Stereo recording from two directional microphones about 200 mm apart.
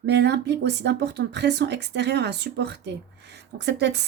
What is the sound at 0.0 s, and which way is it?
Speech, 55° right (ahead or behind).